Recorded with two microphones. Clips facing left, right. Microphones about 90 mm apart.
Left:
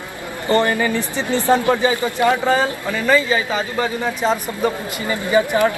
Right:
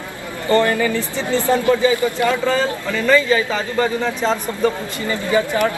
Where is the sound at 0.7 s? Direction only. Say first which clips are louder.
Even; 20° left (ahead or behind).